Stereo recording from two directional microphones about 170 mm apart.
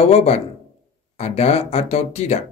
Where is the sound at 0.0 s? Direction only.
40° left (ahead or behind).